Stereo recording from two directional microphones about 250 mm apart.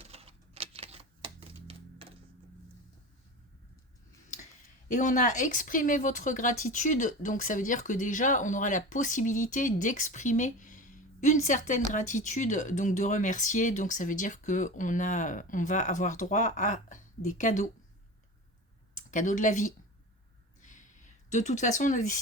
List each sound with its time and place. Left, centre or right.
0.0 s typewriter: right
4.9 s speech: left
18.9 s speech: left
20.6 s a sound: left